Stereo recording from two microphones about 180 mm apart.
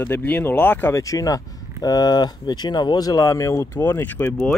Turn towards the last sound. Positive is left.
turn(degrees=5)  # may be behind; listen again after turning